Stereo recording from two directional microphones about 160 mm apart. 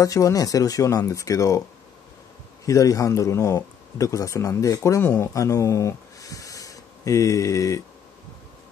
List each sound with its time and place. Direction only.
0.0 s speech: 20° left (ahead or behind)
2.6 s speech: 20° left (ahead or behind)